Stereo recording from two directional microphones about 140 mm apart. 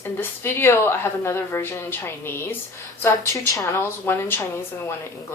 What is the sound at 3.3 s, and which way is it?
Speech, 20° left (ahead or behind).